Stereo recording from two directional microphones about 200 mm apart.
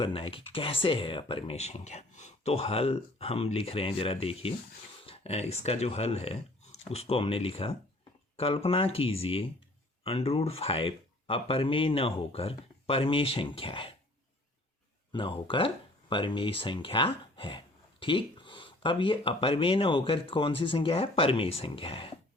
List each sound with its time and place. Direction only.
0.0 s speech: 25° left (ahead or behind)
15.1 s speech: 25° left (ahead or behind)